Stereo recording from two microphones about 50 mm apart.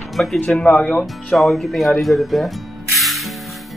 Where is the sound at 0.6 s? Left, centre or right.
Left.